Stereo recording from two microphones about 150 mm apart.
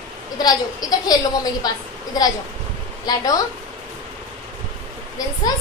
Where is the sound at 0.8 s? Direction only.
25° left (ahead or behind).